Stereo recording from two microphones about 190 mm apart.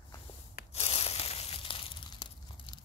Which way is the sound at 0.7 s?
30° left (ahead or behind).